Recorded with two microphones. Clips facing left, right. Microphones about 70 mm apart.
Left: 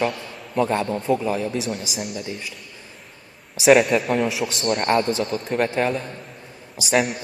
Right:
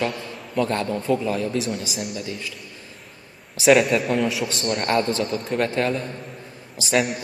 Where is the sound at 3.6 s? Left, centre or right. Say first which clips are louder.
Left 1 dB; centre.